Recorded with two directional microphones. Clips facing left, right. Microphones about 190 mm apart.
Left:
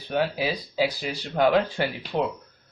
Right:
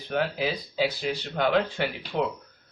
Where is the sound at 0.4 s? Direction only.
35° left (ahead or behind).